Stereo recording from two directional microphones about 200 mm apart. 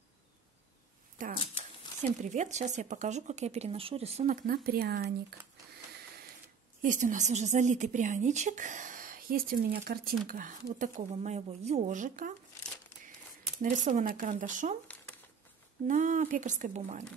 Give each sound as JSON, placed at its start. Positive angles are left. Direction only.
{"t": 1.1, "sound": "a sound", "side_deg": -40}
{"t": 2.3, "sound": "a woman's voice", "side_deg": -35}
{"t": 4.5, "sound": "speech", "side_deg": -50}
{"t": 6.8, "sound": "a woman's voice", "side_deg": -40}
{"t": 13.6, "sound": "a woman's voice", "side_deg": -40}
{"t": 15.9, "sound": "a woman's voice", "side_deg": -40}